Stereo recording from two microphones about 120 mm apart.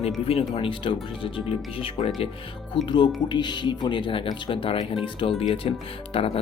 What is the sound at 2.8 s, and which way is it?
Speech, 40° left (ahead or behind).